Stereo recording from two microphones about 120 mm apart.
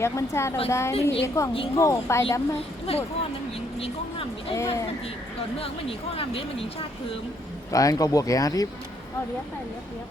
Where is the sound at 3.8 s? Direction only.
55° left (ahead or behind).